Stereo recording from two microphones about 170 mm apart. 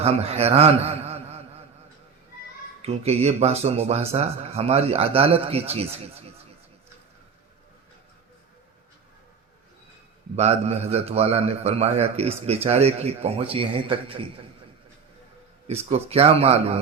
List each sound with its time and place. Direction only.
0.0 s a man's voice: 35° right (ahead or behind)
2.8 s a man's voice: 35° right (ahead or behind)
10.3 s a man's voice: 40° right (ahead or behind)
15.6 s a man's voice: 35° right (ahead or behind)